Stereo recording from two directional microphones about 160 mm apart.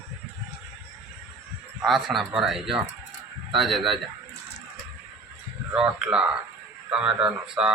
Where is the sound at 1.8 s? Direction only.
Centre (ahead or behind).